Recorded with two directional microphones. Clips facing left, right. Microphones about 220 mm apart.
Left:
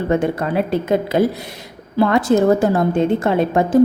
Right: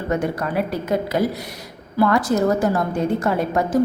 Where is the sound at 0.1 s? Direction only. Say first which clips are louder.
Left 3 dB; 25° left (ahead or behind).